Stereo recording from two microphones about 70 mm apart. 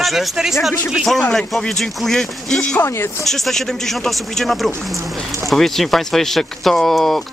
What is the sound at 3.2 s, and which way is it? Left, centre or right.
Speech, centre.